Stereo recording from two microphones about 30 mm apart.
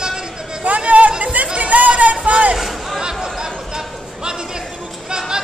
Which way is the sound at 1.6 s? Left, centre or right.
Right.